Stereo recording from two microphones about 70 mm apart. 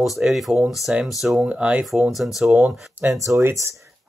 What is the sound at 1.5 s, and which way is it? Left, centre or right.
Speech, centre.